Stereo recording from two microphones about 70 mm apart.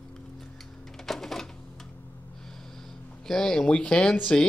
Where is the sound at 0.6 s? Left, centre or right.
Centre.